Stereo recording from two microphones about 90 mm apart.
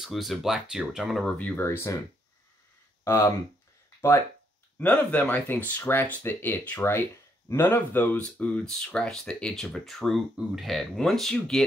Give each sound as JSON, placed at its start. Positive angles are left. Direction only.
{"t": 0.0, "sound": "speech", "side_deg": 0}
{"t": 1.2, "sound": "speech", "side_deg": 15}
{"t": 1.6, "sound": "speech", "side_deg": 30}
{"t": 3.0, "sound": "speech", "side_deg": 35}
{"t": 4.7, "sound": "speech", "side_deg": 20}
{"t": 8.2, "sound": "speech", "side_deg": 10}